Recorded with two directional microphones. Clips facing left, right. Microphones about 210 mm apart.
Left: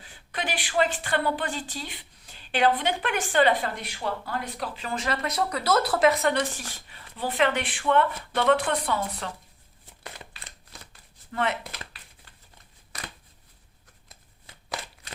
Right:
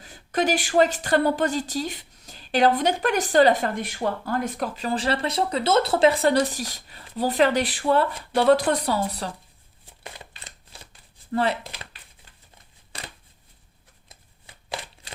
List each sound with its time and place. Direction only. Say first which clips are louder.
0.0 s speech: right 10 dB; 45° right (ahead or behind)
11.3 s speech: right 5 dB; 35° right (ahead or behind)
12.9 s shuffling cards: right 1 dB; 30° right (ahead or behind)